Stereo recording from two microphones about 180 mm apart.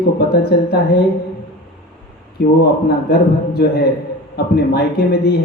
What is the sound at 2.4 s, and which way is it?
Speech, 60° left (ahead or behind).